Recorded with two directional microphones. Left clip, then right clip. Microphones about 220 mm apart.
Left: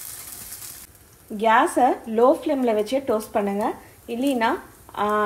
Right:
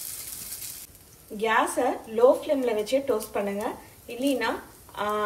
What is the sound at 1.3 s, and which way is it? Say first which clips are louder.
Speech: left 6 dB; 40° left (ahead or behind).